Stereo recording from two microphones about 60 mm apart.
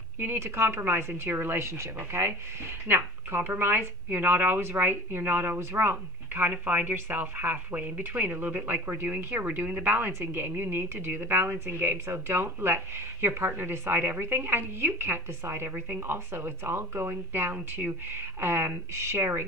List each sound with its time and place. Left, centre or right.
0.2 s speech: right
10.1 s speech: right